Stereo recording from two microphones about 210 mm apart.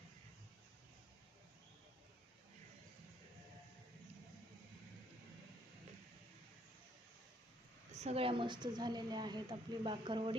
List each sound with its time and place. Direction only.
7.9 s a woman's voice: 30° right (ahead or behind)